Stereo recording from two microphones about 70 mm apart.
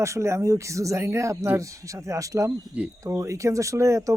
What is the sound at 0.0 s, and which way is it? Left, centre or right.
Speech, right.